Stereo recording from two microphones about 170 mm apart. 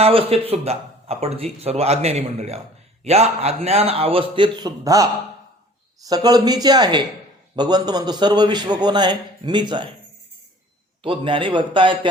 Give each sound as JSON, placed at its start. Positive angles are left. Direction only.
{"t": 0.0, "sound": "a man's voice", "side_deg": -35}
{"t": 11.0, "sound": "a man's voice", "side_deg": -30}